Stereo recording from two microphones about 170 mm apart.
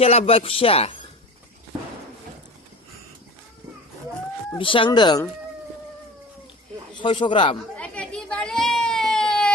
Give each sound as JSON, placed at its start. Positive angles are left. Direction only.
{"t": 0.0, "sound": "speech", "side_deg": 35}
{"t": 4.5, "sound": "speech", "side_deg": 30}
{"t": 7.0, "sound": "speech", "side_deg": 30}
{"t": 7.8, "sound": "baby cry", "side_deg": 5}